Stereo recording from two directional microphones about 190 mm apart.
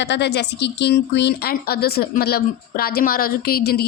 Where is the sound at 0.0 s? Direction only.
65° left (ahead or behind).